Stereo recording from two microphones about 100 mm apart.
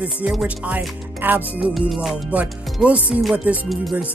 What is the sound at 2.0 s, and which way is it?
Music, 10° right (ahead or behind).